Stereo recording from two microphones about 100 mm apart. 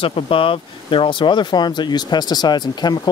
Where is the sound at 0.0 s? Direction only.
65° left (ahead or behind).